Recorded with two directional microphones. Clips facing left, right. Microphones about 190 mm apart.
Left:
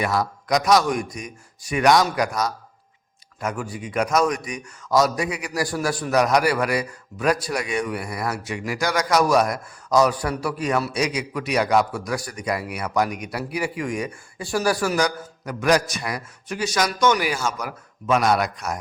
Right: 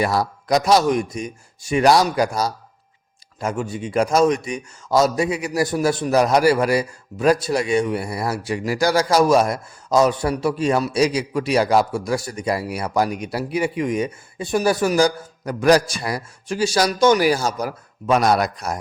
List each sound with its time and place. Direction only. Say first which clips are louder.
0.0 s a man's voice: right 3 dB; 35° right (ahead or behind)